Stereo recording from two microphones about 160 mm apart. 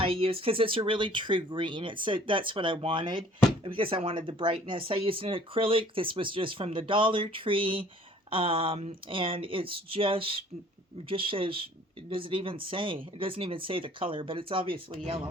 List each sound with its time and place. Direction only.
0.0 s speech: 35° right (ahead or behind)